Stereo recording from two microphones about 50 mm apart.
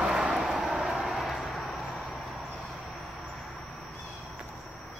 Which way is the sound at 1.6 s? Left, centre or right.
Left.